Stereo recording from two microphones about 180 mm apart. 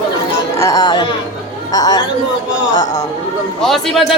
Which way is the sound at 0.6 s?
20° left (ahead or behind).